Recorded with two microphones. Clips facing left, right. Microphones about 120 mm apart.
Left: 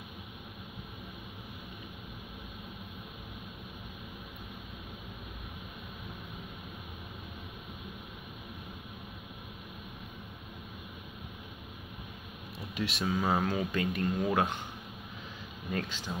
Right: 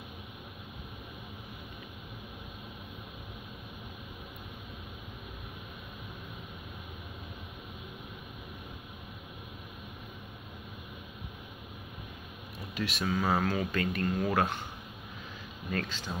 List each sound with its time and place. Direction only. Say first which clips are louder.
12.5 s speech: even; 25° left (ahead or behind)
15.7 s speech: right 1 dB; 15° left (ahead or behind)